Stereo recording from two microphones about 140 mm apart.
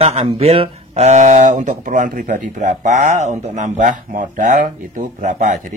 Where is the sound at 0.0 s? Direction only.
45° right (ahead or behind).